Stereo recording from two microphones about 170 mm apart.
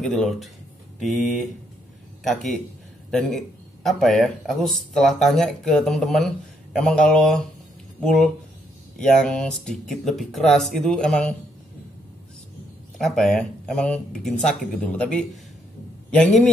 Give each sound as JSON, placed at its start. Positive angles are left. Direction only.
{"t": 0.0, "sound": "speech", "side_deg": 0}
{"t": 12.9, "sound": "a man's voice", "side_deg": 0}